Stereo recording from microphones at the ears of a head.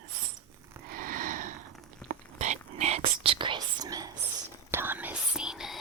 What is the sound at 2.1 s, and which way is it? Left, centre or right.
Whispering, right.